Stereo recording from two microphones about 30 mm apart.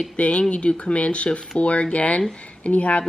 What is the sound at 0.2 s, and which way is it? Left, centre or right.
Speech, left.